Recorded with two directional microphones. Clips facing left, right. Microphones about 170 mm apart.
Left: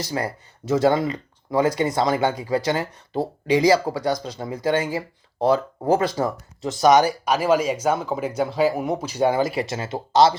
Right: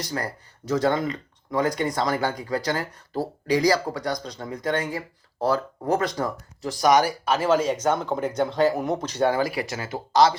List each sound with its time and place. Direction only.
0.7 s speech: 25° left (ahead or behind)